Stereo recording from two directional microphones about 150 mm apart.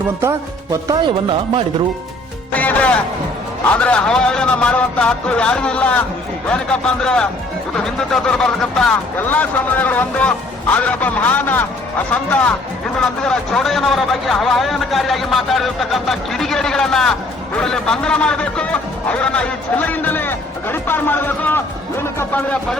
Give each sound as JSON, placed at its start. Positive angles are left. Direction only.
{"t": 0.2, "sound": "music", "side_deg": -20}
{"t": 2.5, "sound": "speech", "side_deg": 10}